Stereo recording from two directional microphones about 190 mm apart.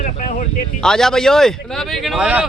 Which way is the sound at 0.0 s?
45° left (ahead or behind).